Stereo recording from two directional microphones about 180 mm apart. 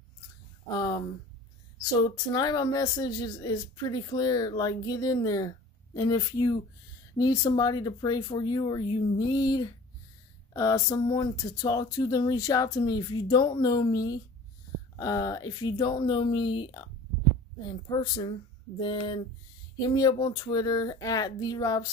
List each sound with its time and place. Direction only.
0.7 s speech: 25° left (ahead or behind)
2.0 s speech: 20° left (ahead or behind)